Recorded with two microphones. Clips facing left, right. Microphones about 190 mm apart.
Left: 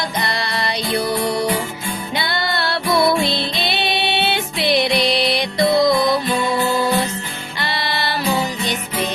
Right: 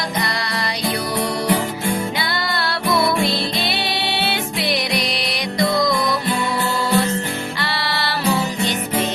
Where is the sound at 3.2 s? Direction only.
25° left (ahead or behind).